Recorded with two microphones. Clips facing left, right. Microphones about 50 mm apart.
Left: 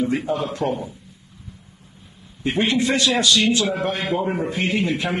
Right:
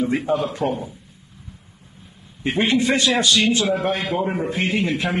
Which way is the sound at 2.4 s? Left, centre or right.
Right.